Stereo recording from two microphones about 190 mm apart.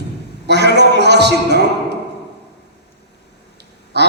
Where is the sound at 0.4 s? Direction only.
60° right (ahead or behind).